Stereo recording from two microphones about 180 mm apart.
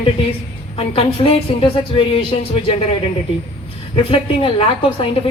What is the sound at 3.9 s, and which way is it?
Speech, 30° left (ahead or behind).